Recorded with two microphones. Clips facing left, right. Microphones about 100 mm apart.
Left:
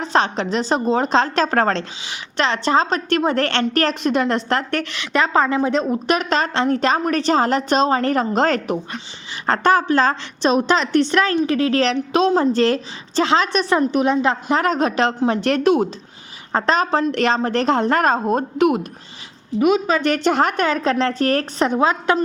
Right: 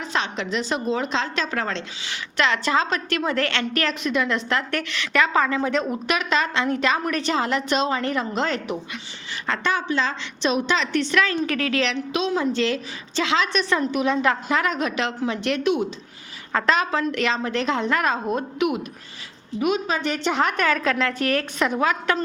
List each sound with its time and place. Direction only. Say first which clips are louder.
0.0 s a woman's voice: left 7 dB; 35° left (ahead or behind)
2.4 s a woman's voice: left 4 dB; 30° left (ahead or behind)
11.4 s a woman's voice: left 6 dB; 25° left (ahead or behind)
11.7 s a woman's voice: left 6 dB; 35° left (ahead or behind)
14.6 s a woman's voice: left 6 dB; 35° left (ahead or behind)
19.6 s a woman's voice: left 6 dB; 90° left
20.2 s a woman's voice: left 1 dB; 35° left (ahead or behind)